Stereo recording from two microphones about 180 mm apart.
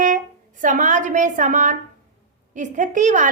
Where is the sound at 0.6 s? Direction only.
45° right (ahead or behind).